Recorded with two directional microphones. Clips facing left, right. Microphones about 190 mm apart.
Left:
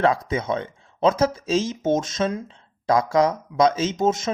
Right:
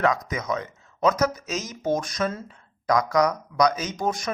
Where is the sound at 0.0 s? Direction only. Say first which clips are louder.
Left 3 dB; 30° left (ahead or behind).